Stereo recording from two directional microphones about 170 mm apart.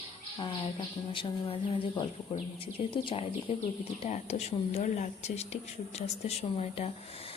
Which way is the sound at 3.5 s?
35° left (ahead or behind).